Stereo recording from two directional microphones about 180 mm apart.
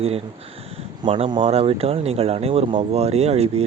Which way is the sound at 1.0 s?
25° right (ahead or behind).